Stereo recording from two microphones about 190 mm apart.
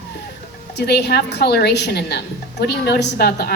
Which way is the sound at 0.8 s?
60° left (ahead or behind).